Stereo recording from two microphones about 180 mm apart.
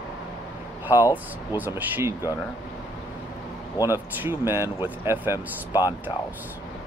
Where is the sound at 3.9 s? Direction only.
15° right (ahead or behind).